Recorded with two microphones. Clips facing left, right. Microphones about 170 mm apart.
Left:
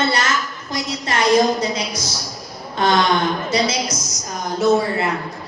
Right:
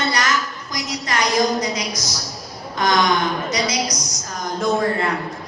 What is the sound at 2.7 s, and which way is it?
A woman's voice, 30° left (ahead or behind).